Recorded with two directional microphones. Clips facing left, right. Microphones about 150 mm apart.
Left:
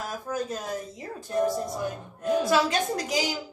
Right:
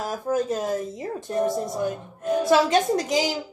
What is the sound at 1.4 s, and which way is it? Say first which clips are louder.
Speech: right 2 dB; centre (ahead or behind).